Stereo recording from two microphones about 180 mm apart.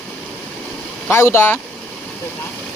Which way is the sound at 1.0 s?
15° left (ahead or behind).